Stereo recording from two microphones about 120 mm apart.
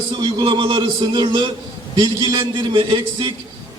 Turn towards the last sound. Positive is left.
turn(degrees=-45)  # may be behind; listen again after turning